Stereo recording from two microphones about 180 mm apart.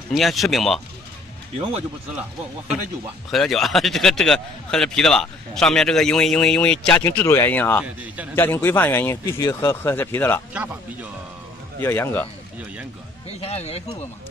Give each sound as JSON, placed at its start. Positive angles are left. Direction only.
{"t": 0.1, "sound": "a man's voice", "side_deg": 0}
{"t": 3.3, "sound": "a man's voice", "side_deg": 0}
{"t": 7.8, "sound": "speech", "side_deg": -10}
{"t": 8.4, "sound": "speech", "side_deg": 15}
{"t": 10.5, "sound": "speech", "side_deg": -10}
{"t": 11.8, "sound": "speech", "side_deg": 10}
{"t": 13.3, "sound": "speech", "side_deg": 35}